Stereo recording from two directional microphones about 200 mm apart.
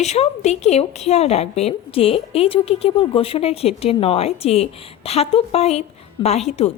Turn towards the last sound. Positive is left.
turn(degrees=35)  # may be behind; listen again after turning